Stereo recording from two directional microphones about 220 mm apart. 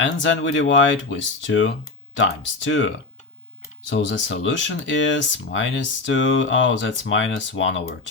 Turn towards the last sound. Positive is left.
turn(degrees=55)  # may be behind; listen again after turning